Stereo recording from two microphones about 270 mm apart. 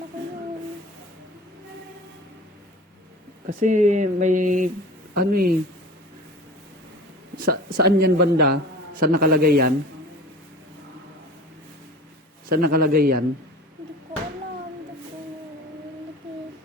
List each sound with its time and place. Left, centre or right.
3.4 s a man's voice: right
7.3 s a sound: right
7.9 s a man's voice: right
12.5 s a man's voice: right